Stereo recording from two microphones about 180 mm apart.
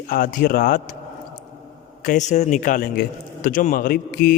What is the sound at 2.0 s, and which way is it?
A man's voice, 45° left (ahead or behind).